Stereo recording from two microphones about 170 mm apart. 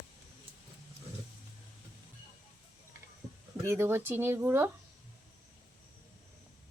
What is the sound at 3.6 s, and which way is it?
Speech, 15° right (ahead or behind).